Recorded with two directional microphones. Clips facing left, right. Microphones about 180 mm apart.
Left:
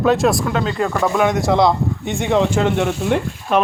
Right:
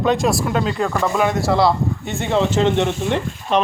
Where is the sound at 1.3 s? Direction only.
20° left (ahead or behind).